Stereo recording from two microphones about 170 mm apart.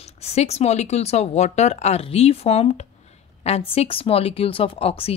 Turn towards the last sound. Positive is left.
turn(degrees=35)  # may be behind; listen again after turning